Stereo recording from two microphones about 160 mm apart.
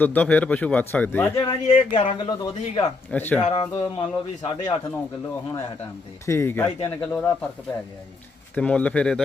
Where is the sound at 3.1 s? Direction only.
10° left (ahead or behind).